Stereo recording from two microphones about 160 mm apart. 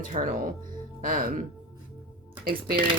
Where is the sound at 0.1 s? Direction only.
55° right (ahead or behind).